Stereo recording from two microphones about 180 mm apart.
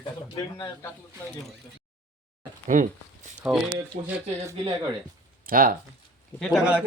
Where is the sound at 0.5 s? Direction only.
20° left (ahead or behind).